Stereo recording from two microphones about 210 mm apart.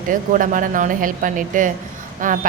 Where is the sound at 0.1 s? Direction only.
40° right (ahead or behind).